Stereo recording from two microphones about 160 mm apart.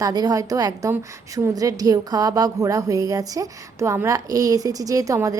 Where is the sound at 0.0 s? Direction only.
25° right (ahead or behind).